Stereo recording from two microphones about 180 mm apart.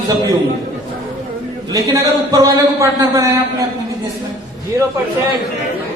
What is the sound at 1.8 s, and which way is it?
Speech, 15° right (ahead or behind).